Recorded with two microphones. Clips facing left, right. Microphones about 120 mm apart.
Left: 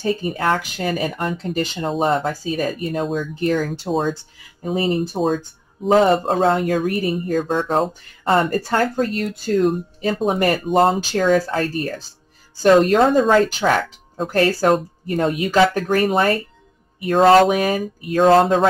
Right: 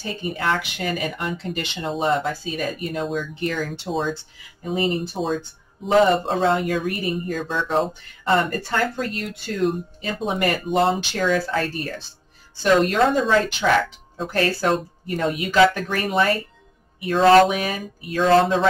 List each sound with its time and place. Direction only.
0.2 s speech: 40° left (ahead or behind)